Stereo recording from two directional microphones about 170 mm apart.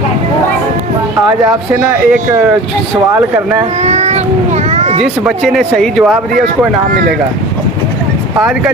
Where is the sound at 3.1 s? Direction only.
10° right (ahead or behind).